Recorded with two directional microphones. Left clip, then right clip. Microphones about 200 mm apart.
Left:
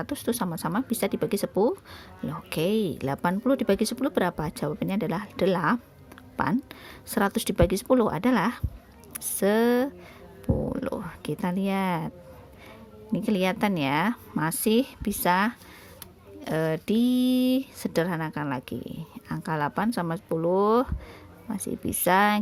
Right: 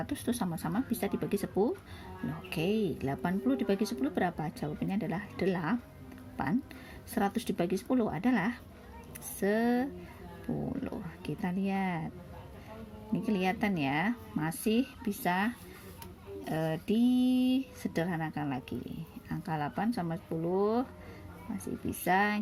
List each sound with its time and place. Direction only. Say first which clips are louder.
0.0 s speech: left 6 dB; 30° left (ahead or behind)
13.1 s speech: left 6 dB; 40° left (ahead or behind)